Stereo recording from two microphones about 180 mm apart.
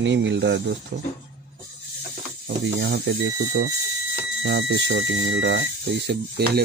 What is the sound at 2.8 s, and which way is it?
Speech, 90° right.